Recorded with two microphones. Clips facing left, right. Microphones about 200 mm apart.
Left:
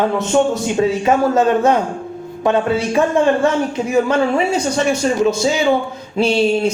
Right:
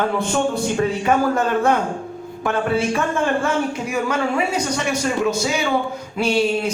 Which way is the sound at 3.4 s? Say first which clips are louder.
Left 5 dB; 25° left (ahead or behind).